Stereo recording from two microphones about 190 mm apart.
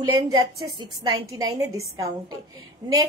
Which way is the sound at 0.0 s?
20° right (ahead or behind).